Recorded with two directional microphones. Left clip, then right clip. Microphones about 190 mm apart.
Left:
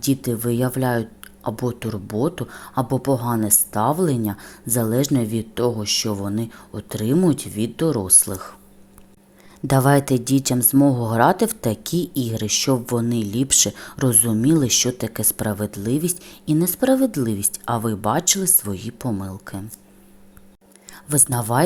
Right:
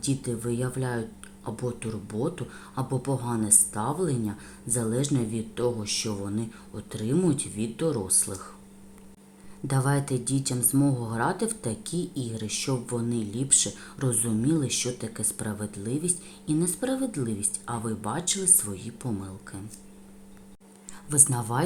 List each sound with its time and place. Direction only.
0.0 s a woman's voice: 40° left (ahead or behind)
9.6 s a woman's voice: 40° left (ahead or behind)
20.9 s speech: 35° left (ahead or behind)